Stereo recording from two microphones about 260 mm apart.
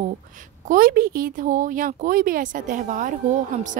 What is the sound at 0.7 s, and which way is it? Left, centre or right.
Speech, right.